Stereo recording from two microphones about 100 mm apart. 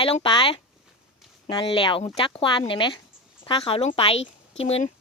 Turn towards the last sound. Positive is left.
turn(degrees=85)